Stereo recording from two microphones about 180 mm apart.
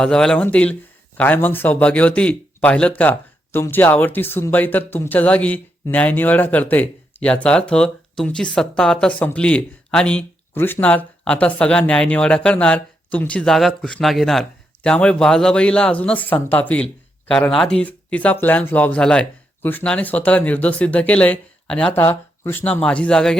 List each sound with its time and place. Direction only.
0.0 s speech: 5° left (ahead or behind)